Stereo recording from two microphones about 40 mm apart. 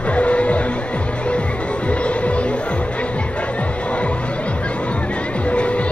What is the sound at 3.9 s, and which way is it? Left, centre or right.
Music, left.